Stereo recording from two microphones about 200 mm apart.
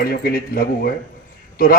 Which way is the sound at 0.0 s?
50° left (ahead or behind).